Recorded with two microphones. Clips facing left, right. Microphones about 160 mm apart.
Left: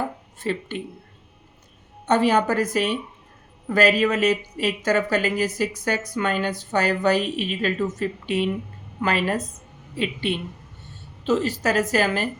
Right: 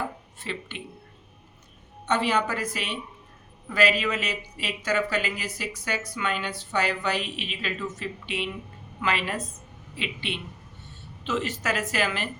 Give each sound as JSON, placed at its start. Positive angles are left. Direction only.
{"t": 0.3, "sound": "speech", "side_deg": 45}
{"t": 2.0, "sound": "a woman's voice", "side_deg": 45}